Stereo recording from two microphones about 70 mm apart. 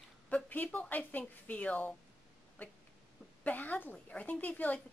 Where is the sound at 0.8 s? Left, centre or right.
Left.